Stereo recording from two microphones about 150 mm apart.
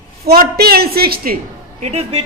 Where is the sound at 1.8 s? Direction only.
45° right (ahead or behind).